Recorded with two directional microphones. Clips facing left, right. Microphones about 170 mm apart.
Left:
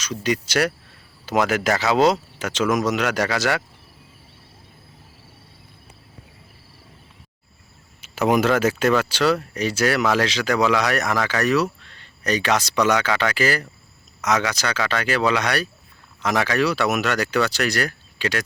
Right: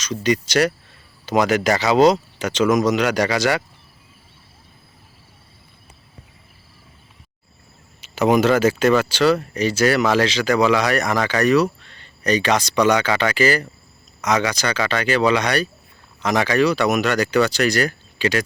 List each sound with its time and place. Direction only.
0.0 s speech: 5° left (ahead or behind)
8.1 s speech: 5° left (ahead or behind)